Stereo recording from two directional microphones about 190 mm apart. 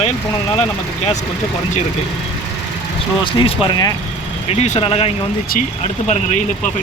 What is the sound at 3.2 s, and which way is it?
Speech, 25° left (ahead or behind).